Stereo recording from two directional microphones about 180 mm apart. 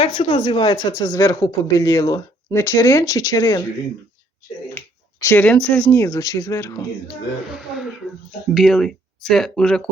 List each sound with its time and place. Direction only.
0.0 s speech: 30° left (ahead or behind)
5.2 s speech: 10° left (ahead or behind)
8.5 s speech: centre (ahead or behind)